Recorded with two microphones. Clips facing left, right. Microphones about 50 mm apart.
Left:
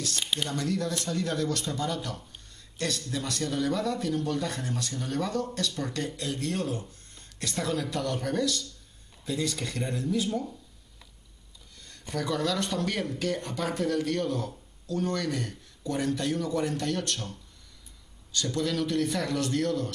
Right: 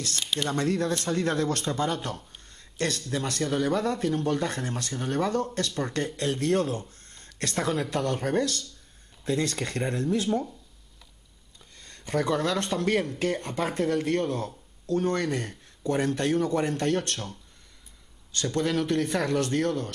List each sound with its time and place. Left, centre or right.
0.1 s speech: centre
0.5 s speech: right
6.9 s a sound: right
7.9 s speech: right
11.8 s a sound: right
12.2 s speech: right
18.3 s speech: right